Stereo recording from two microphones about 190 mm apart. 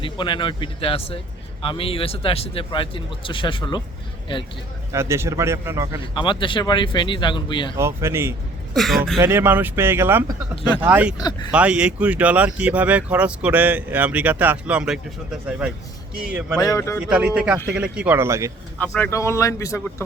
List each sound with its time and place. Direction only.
0.0 s speech: 25° left (ahead or behind)
4.9 s speech: 15° right (ahead or behind)
6.0 s speech: 25° left (ahead or behind)
7.8 s speech: 15° right (ahead or behind)
8.7 s a man's voice: centre (ahead or behind)
9.2 s speech: 10° right (ahead or behind)
11.2 s speech: 20° left (ahead or behind)
11.5 s a man's voice: 5° right (ahead or behind)
16.6 s speech: 15° left (ahead or behind)
17.1 s a man's voice: 5° right (ahead or behind)
18.8 s speech: 10° left (ahead or behind)